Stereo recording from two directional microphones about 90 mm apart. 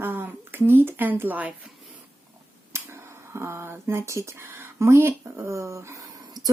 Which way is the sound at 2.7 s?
30° right (ahead or behind).